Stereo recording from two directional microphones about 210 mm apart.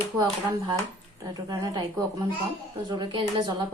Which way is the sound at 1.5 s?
20° right (ahead or behind).